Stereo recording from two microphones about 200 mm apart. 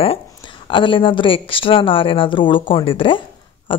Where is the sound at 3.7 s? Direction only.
25° left (ahead or behind).